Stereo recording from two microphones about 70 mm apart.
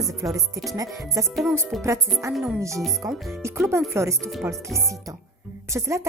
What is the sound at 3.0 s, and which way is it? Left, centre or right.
Speech, right.